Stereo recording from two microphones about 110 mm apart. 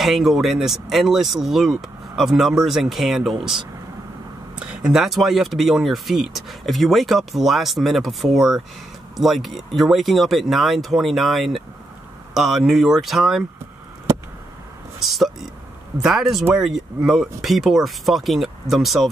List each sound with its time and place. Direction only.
0.0 s speech: centre (ahead or behind)
15.0 s speech: centre (ahead or behind)